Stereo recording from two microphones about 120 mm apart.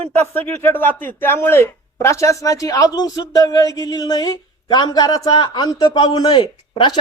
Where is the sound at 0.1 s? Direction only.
15° left (ahead or behind).